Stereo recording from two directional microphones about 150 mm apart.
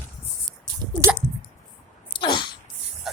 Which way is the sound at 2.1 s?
30° left (ahead or behind).